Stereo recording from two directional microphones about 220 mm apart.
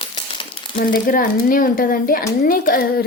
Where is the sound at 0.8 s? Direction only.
40° left (ahead or behind).